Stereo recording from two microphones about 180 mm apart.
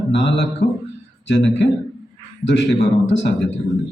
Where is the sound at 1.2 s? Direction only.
80° left.